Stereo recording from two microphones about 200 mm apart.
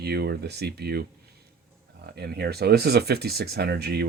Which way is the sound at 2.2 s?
50° right (ahead or behind).